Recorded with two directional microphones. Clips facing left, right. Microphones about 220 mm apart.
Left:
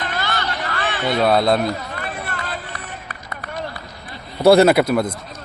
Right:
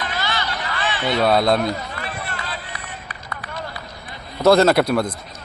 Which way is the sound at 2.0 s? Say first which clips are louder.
Left 2 dB; 50° left (ahead or behind).